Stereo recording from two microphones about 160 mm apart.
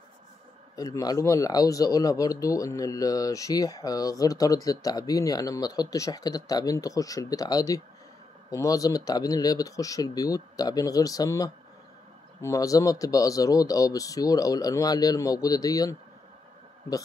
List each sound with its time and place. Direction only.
0.7 s speech: 25° left (ahead or behind)